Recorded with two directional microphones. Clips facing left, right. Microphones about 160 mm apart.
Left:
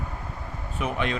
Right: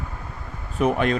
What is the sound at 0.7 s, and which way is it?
Speech, 45° right (ahead or behind).